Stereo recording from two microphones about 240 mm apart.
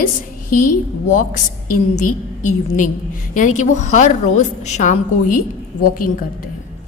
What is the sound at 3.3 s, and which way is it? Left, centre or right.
A woman's voice, left.